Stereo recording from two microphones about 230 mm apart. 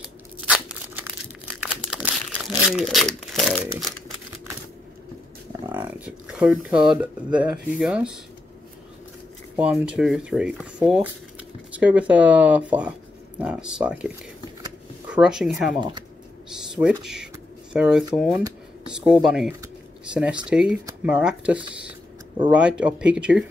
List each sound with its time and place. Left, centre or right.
0.0 s tearing: centre
1.6 s crumpling: centre
5.7 s speech: centre
9.6 s speech: centre
17.0 s speech: centre